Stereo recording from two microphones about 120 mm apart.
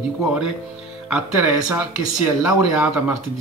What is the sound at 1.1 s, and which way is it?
Speech, 15° right (ahead or behind).